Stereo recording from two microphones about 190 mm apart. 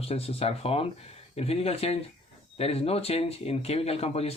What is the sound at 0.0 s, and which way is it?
Speech, 30° left (ahead or behind).